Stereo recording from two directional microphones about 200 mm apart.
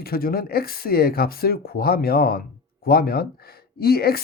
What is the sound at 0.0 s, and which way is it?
Speech, 50° left (ahead or behind).